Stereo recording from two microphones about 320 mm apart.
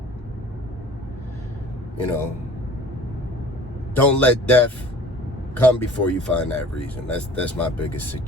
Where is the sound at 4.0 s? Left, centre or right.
Centre.